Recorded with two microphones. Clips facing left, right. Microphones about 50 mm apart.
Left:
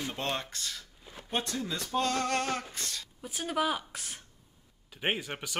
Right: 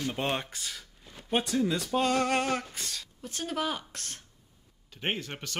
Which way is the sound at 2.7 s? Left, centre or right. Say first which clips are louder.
Even; centre.